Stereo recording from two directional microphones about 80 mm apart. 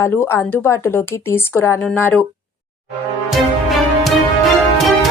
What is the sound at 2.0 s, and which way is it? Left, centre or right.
Speech, left.